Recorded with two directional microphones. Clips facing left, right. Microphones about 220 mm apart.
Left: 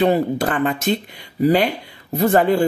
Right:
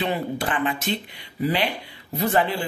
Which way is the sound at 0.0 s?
45° left (ahead or behind).